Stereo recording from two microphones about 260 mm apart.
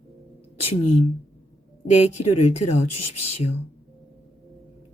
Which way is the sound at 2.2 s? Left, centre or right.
Left.